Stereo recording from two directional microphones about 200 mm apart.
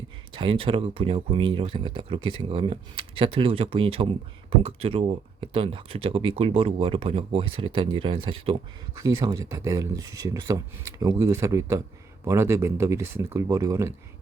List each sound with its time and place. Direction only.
0.3 s speech: 25° right (ahead or behind)